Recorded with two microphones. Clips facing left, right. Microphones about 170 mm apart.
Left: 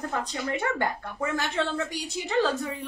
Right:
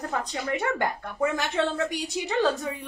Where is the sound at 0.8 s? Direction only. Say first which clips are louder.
Right 3 dB; 20° right (ahead or behind).